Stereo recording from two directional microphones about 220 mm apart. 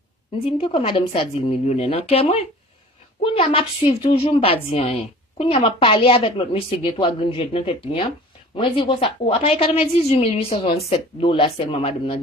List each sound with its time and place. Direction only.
0.4 s a woman's voice: 25° left (ahead or behind)